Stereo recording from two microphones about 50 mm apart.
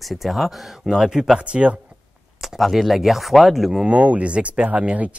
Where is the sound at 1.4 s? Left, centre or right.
Right.